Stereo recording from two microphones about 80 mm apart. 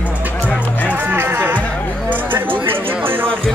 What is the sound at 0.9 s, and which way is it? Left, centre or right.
Music, right.